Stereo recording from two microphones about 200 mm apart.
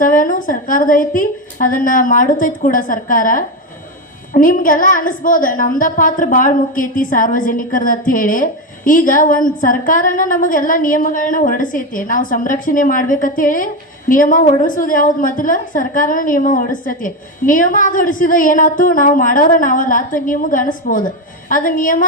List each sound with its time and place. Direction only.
0.0 s a woman's voice: 40° left (ahead or behind)